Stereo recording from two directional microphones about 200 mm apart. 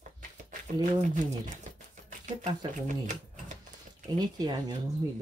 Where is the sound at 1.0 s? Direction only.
40° right (ahead or behind).